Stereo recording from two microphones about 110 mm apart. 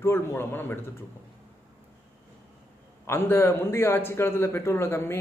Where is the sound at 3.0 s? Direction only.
20° left (ahead or behind).